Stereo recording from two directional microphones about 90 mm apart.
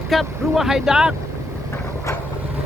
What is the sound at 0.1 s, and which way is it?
Speech, centre (ahead or behind).